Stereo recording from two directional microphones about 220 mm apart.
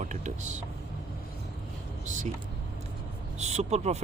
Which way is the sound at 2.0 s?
35° right (ahead or behind).